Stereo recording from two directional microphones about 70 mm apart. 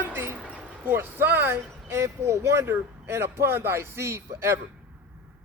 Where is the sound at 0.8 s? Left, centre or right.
Right.